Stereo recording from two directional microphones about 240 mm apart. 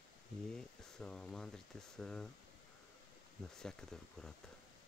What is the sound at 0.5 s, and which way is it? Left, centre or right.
Speech, centre.